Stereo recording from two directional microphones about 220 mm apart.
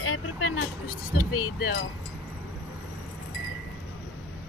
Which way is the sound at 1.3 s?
85° left.